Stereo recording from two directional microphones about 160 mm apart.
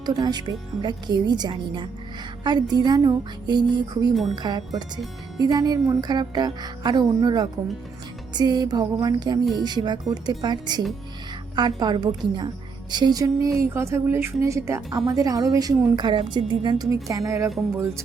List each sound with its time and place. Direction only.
0.0 s a woman's voice: 25° right (ahead or behind)